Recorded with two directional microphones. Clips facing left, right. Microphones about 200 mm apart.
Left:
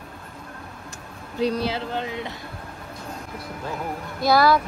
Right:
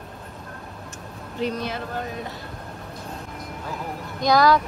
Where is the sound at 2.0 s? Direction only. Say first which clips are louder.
Left 2 dB; 90° left.